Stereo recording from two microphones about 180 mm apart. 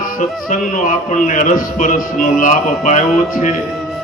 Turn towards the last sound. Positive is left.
turn(degrees=45)  # may be behind; listen again after turning